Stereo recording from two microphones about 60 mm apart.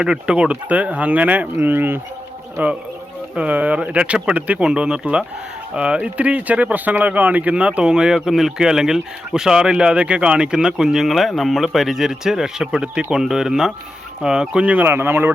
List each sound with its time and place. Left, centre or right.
0.0 s speech: centre
14.8 s speech: right